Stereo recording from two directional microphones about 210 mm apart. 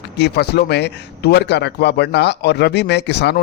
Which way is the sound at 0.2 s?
50° left (ahead or behind).